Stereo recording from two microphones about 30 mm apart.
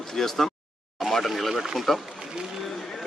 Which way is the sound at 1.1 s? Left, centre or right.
Centre.